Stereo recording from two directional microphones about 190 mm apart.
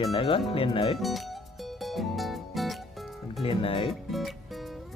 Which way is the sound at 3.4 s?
30° left (ahead or behind).